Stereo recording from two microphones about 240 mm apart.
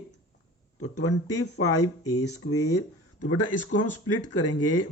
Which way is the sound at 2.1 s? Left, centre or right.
Left.